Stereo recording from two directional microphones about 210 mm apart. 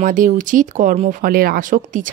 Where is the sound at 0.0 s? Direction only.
40° right (ahead or behind).